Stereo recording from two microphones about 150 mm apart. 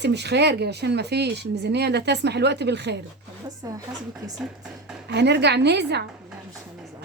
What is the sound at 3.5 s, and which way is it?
Speech, 25° right (ahead or behind).